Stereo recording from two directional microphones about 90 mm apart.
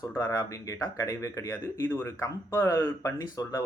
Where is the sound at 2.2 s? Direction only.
35° left (ahead or behind).